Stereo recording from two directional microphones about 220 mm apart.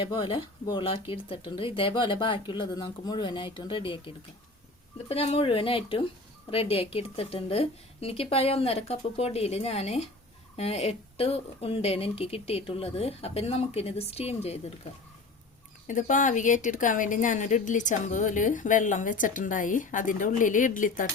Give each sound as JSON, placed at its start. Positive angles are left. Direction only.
{"t": 0.0, "sound": "speech", "side_deg": 20}
{"t": 15.9, "sound": "a woman's voice", "side_deg": 35}